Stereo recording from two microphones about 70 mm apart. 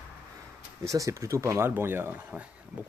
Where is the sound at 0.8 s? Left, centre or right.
Right.